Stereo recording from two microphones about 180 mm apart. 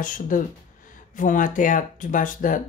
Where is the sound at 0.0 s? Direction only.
45° left (ahead or behind).